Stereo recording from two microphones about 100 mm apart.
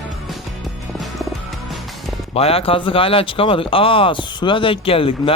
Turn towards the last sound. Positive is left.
turn(degrees=65)  # may be behind; listen again after turning